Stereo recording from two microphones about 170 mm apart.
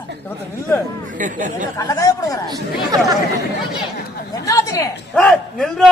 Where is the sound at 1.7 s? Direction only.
20° left (ahead or behind).